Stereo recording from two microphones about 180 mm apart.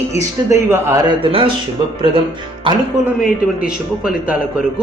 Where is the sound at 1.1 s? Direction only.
30° right (ahead or behind).